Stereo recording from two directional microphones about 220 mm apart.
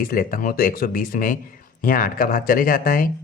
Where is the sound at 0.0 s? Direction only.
40° left (ahead or behind).